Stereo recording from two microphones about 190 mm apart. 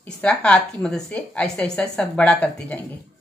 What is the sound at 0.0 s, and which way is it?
A woman's voice, 5° left (ahead or behind).